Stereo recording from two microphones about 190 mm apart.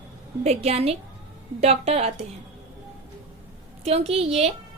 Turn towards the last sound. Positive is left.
turn(degrees=-30)  # may be behind; listen again after turning